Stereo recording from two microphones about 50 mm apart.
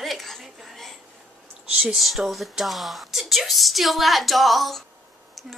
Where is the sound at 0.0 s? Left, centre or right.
Centre.